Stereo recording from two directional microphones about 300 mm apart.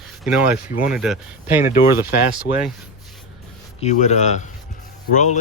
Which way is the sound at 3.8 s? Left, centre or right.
Left.